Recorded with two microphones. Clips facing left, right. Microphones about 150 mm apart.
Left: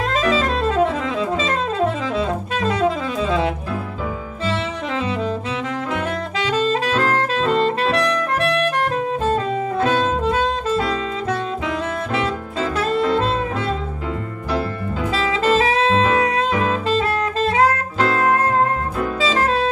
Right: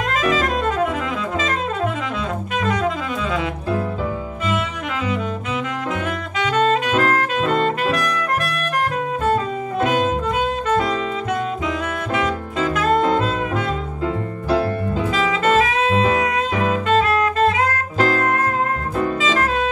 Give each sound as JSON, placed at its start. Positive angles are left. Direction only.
{"t": 0.1, "sound": "music", "side_deg": 30}
{"t": 2.1, "sound": "saxophone", "side_deg": 30}
{"t": 6.4, "sound": "saxophone", "side_deg": 30}
{"t": 9.8, "sound": "music", "side_deg": 30}
{"t": 15.1, "sound": "saxophone", "side_deg": 30}
{"t": 19.2, "sound": "music", "side_deg": 35}